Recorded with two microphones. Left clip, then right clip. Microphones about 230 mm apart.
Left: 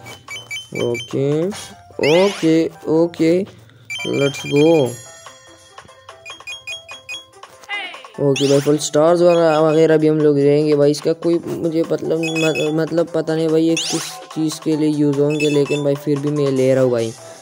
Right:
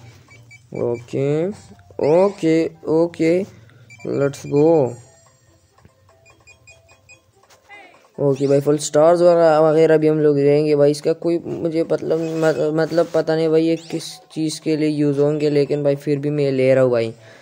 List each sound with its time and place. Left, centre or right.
0.3 s music: left
1.0 s speech: centre
6.2 s music: left
8.5 s speech: centre
13.7 s speech: left
14.7 s speech: centre